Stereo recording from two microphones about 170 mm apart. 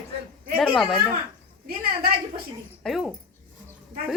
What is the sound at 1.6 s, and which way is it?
Speech, 65° right (ahead or behind).